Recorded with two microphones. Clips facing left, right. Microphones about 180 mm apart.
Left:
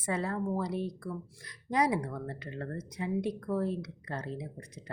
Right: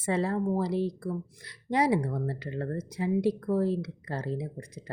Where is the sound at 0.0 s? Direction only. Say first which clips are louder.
Right 5 dB; 30° right (ahead or behind).